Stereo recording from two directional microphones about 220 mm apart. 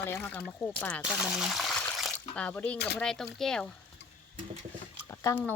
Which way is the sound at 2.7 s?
50° left (ahead or behind).